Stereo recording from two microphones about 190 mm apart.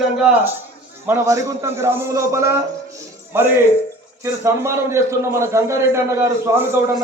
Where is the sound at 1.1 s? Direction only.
15° right (ahead or behind).